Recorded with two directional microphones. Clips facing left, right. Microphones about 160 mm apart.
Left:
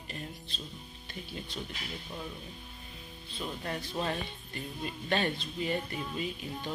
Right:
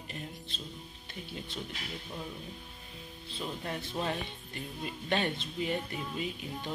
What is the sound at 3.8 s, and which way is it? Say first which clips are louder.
Speech: even; 20° right (ahead or behind).